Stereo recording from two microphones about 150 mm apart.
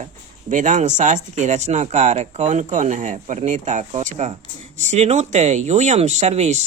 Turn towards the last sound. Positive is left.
turn(degrees=-50)  # may be behind; listen again after turning